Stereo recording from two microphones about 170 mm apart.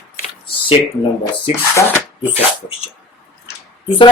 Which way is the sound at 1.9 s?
10° right (ahead or behind).